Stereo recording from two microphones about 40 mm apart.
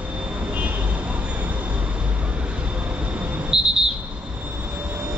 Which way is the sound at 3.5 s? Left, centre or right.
Centre.